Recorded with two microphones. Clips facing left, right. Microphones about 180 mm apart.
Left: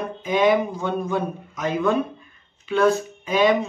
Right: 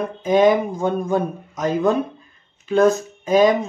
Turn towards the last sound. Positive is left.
turn(degrees=-40)  # may be behind; listen again after turning